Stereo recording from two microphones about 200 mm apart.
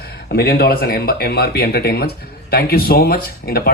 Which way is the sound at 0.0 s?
50° left (ahead or behind).